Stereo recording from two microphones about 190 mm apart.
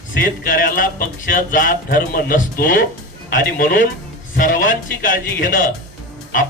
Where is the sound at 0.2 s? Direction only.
50° left (ahead or behind).